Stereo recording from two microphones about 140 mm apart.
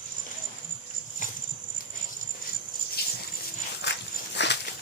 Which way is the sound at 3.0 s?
90° left.